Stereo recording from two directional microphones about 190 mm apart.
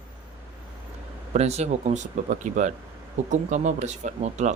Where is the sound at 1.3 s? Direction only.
35° right (ahead or behind).